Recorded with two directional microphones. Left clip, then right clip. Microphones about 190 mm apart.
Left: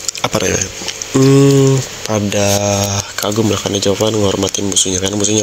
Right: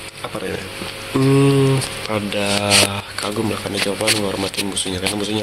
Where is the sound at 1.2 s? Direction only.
30° left (ahead or behind).